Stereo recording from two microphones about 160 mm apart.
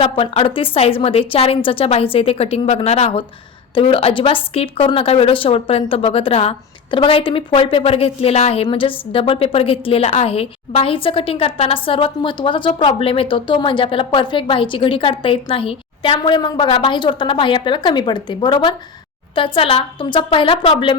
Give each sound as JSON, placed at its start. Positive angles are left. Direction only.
{"t": 0.0, "sound": "a woman's voice", "side_deg": 35}